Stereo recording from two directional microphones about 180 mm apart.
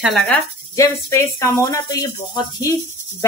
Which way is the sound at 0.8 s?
15° left (ahead or behind).